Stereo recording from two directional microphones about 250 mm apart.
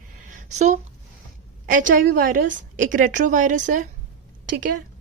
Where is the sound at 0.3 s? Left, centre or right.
Right.